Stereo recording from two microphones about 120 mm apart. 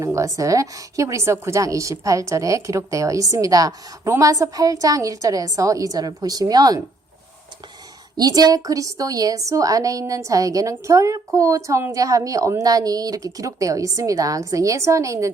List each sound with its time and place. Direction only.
0.0 s a woman's voice: 25° right (ahead or behind)
8.1 s a woman's voice: 30° right (ahead or behind)